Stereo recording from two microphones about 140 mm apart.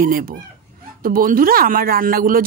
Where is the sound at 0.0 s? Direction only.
90° right.